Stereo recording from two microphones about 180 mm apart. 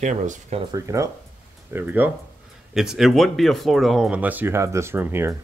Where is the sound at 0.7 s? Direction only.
15° right (ahead or behind).